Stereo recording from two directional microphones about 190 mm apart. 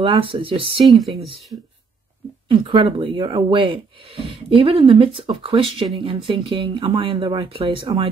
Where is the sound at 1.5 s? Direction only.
25° right (ahead or behind).